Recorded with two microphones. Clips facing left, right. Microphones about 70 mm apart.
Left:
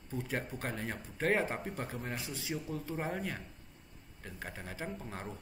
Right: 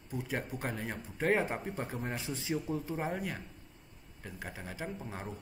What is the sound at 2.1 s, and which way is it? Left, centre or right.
Speech, right.